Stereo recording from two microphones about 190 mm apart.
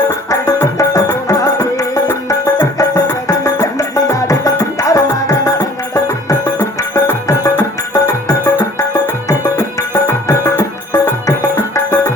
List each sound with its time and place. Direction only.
0.1 s music: 15° left (ahead or behind)